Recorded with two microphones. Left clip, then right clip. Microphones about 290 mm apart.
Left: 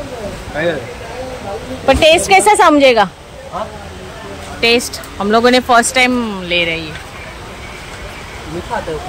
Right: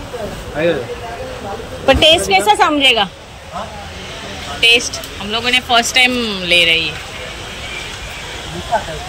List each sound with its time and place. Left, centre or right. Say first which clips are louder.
1.9 s speech: left 1 dB; centre
4.6 s speech: right 1 dB; centre